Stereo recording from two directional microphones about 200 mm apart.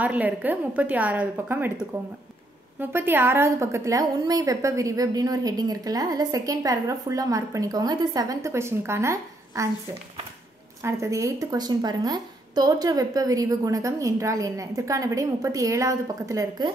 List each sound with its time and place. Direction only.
0.0 s a woman's voice: 10° right (ahead or behind)
10.8 s a woman's voice: 15° right (ahead or behind)